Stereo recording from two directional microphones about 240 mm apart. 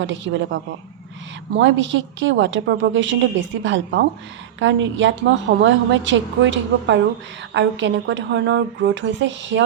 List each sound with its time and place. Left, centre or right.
0.0 s a woman's voice: right